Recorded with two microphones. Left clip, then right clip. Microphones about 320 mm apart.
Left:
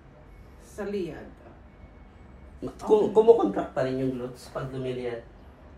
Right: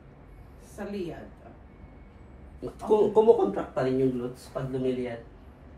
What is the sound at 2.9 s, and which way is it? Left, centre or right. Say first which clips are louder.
Speech: left 1 dB; left.